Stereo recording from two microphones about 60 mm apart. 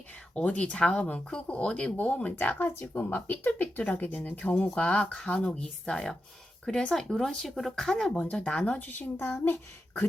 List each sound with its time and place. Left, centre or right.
0.3 s speech: left
8.2 s speech: centre
8.8 s speech: left